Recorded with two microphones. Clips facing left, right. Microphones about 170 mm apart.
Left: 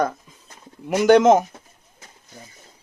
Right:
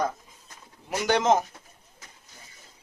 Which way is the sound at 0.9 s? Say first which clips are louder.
Left 9 dB; 55° left (ahead or behind).